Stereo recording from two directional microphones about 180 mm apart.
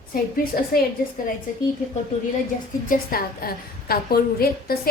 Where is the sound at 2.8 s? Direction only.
50° left (ahead or behind).